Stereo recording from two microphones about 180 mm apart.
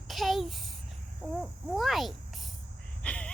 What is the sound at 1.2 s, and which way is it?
A child's voice, centre (ahead or behind).